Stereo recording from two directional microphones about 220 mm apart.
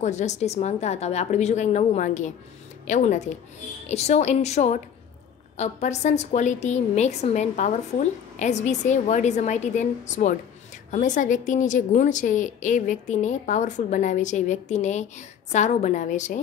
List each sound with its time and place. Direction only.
0.0 s a woman's voice: 35° left (ahead or behind)